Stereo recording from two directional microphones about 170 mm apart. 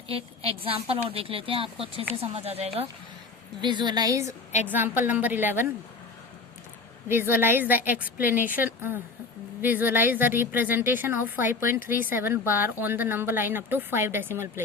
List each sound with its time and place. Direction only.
0.1 s a woman's voice: 35° right (ahead or behind); by 5.6 s 10° right (ahead or behind)
7.1 s a woman's voice: 15° right (ahead or behind)
8.2 s speech: 50° left (ahead or behind)
8.4 s a woman's voice: 10° right (ahead or behind)